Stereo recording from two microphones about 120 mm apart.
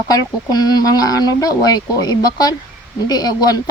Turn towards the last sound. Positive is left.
turn(degrees=35)  # may be behind; listen again after turning